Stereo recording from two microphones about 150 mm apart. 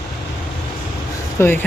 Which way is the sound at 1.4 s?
15° left (ahead or behind).